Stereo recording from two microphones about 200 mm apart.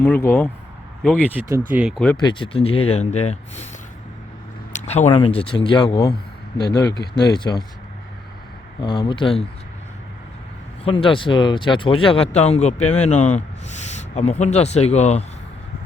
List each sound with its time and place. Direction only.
0.0 s speech: 10° left (ahead or behind)
1.4 s speech: 15° right (ahead or behind)
2.1 s speech: 25° left (ahead or behind)
4.9 s speech: 30° left (ahead or behind)
7.2 s speech: 20° left (ahead or behind)
8.8 s speech: 20° left (ahead or behind)
10.8 s speech: 25° left (ahead or behind)